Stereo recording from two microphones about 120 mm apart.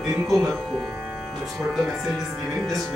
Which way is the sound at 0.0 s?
Centre (ahead or behind).